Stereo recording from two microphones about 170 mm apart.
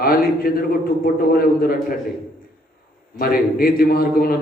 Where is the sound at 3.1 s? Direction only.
60° left (ahead or behind).